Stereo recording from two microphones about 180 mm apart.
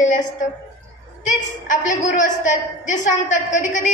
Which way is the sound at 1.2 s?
45° left (ahead or behind).